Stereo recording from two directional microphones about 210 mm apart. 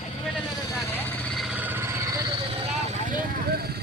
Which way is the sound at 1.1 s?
Centre (ahead or behind).